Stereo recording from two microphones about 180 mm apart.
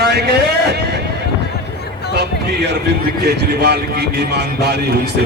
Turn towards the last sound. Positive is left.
turn(degrees=-65)  # may be behind; listen again after turning